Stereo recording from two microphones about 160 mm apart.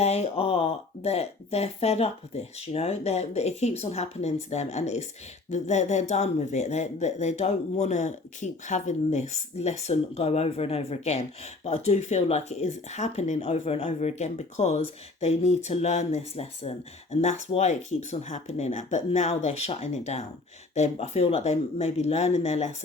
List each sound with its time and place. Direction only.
0.0 s a woman's voice: 40° left (ahead or behind)